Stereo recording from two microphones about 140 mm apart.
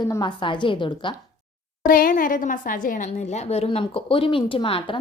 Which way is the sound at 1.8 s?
90° left.